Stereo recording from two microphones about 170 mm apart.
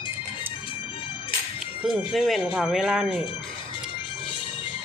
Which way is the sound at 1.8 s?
5° right (ahead or behind).